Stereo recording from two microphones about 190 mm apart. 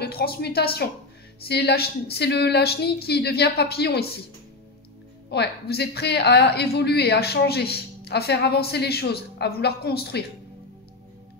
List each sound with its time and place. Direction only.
0.0 s speech: 55° left (ahead or behind)
5.3 s speech: 60° left (ahead or behind)